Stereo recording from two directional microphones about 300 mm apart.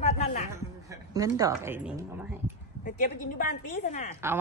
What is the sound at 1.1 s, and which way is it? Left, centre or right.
Speech, centre.